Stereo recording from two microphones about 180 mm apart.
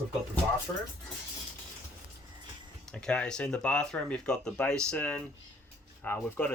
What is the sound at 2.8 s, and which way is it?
Speech, 5° left (ahead or behind).